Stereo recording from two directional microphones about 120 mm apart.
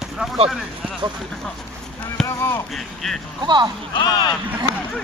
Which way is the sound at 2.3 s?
25° left (ahead or behind).